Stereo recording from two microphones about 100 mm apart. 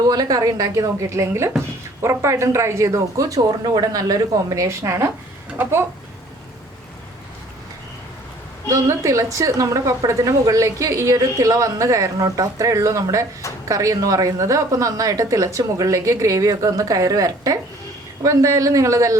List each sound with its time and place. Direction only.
0.0 s a woman's voice: 40° right (ahead or behind)
8.7 s a woman's voice: 30° right (ahead or behind)